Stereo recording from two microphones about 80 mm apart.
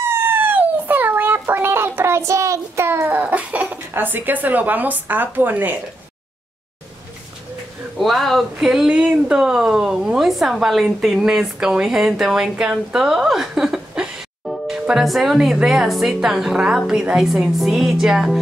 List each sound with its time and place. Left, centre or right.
0.0 s fowl: right
8.0 s a woman's voice: centre